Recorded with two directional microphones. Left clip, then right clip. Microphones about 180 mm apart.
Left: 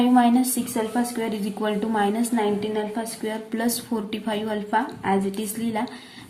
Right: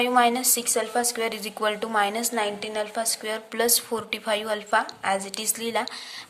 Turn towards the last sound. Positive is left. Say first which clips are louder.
# right 1 dB
turn(degrees=-40)  # may be behind; listen again after turning